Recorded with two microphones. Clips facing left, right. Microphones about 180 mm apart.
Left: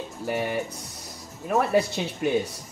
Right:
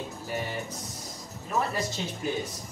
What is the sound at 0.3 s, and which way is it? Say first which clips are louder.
Speech: left 7 dB; 70° left (ahead or behind).